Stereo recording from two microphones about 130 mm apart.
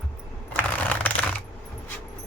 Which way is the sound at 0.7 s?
10° left (ahead or behind).